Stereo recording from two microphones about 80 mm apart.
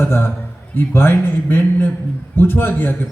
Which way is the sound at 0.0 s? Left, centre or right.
Left.